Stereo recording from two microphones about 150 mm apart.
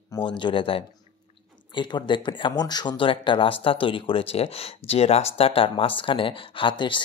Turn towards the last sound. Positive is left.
turn(degrees=30)  # may be behind; listen again after turning